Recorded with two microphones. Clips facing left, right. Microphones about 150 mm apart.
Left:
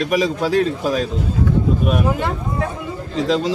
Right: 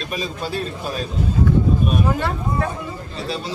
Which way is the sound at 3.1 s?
90° left.